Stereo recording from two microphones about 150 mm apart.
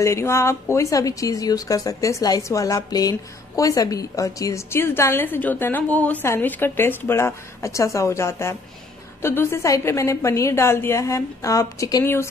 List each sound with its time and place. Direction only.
0.0 s a woman's voice: 20° left (ahead or behind)